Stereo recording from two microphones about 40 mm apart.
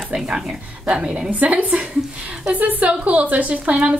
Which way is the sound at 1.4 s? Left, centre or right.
Right.